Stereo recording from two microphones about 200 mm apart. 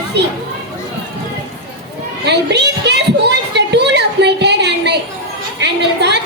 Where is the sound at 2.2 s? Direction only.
60° right (ahead or behind).